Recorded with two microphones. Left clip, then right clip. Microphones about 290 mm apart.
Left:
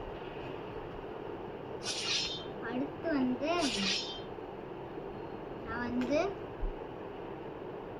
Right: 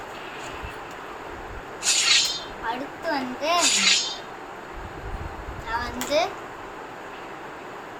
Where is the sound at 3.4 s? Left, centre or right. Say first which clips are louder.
Right 12 dB; centre.